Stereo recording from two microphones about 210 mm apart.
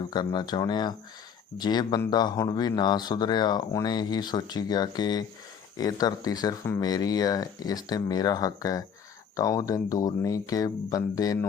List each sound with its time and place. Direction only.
0.0 s speech: 20° left (ahead or behind)